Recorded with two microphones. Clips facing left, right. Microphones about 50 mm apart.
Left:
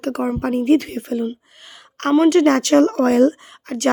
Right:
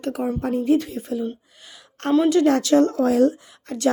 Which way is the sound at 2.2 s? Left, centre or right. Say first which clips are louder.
Left 5 dB; left.